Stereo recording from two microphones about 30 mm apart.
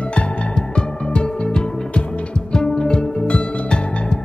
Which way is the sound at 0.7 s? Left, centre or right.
Left.